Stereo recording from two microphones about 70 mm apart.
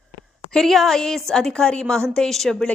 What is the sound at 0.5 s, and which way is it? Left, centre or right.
A woman's voice, centre.